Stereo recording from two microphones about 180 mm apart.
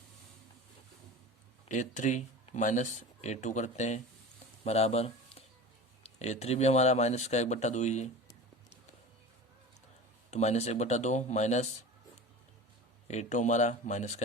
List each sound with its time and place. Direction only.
1.6 s speech: 45° left (ahead or behind)
10.3 s speech: 40° left (ahead or behind)
13.1 s speech: 40° left (ahead or behind)